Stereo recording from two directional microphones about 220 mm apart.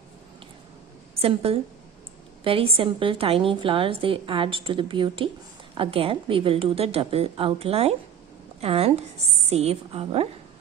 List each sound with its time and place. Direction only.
1.2 s a woman's voice: 25° right (ahead or behind)